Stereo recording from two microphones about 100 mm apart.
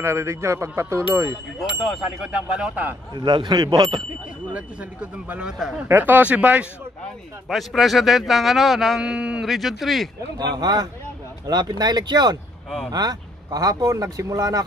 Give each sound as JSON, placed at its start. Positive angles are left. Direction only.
{"t": 0.0, "sound": "speech", "side_deg": -25}
{"t": 1.6, "sound": "speech", "side_deg": -5}
{"t": 3.2, "sound": "speech", "side_deg": -50}
{"t": 5.9, "sound": "speech", "side_deg": -20}
{"t": 7.4, "sound": "speech", "side_deg": 0}
{"t": 10.3, "sound": "speech", "side_deg": -45}